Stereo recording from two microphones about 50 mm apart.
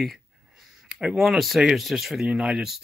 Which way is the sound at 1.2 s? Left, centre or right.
Centre.